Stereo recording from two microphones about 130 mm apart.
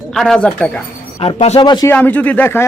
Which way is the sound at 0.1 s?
5° left (ahead or behind).